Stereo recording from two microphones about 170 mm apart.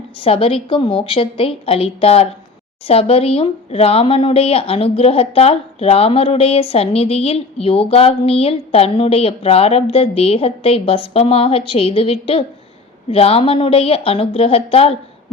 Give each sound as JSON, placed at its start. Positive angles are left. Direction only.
{"t": 0.2, "sound": "speech", "side_deg": 35}